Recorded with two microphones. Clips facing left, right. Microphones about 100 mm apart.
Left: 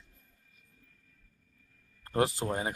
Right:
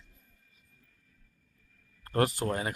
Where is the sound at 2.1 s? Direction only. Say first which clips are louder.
Right 1 dB; 20° left (ahead or behind).